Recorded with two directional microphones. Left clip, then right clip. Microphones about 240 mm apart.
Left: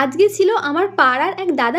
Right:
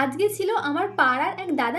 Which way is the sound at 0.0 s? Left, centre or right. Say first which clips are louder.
Left 9 dB; left.